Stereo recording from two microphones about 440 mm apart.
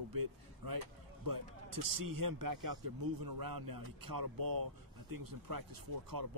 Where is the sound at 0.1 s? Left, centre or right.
Right.